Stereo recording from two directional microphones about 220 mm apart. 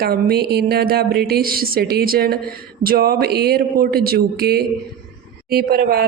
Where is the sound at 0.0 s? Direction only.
45° right (ahead or behind).